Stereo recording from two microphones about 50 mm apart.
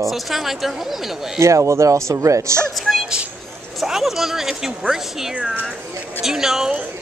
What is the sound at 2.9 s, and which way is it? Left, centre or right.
Speech, centre.